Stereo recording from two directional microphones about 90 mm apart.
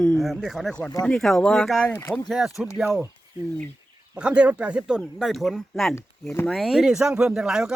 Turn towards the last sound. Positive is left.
turn(degrees=-5)  # may be behind; listen again after turning